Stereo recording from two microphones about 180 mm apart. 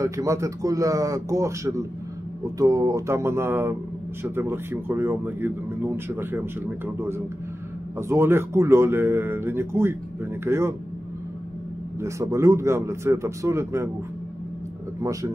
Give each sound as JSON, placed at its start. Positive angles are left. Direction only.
{"t": 0.0, "sound": "speech", "side_deg": -15}
{"t": 12.0, "sound": "speech", "side_deg": -15}
{"t": 15.0, "sound": "speech", "side_deg": -15}